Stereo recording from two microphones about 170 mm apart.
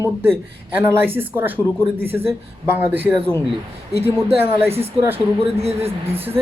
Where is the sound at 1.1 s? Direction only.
10° right (ahead or behind).